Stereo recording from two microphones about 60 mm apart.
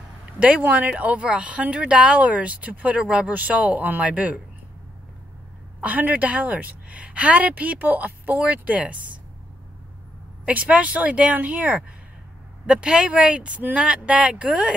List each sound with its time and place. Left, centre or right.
0.4 s speech: right
5.8 s speech: right
10.4 s speech: right